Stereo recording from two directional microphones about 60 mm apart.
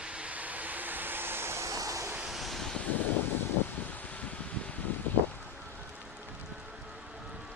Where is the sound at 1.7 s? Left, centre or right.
Right.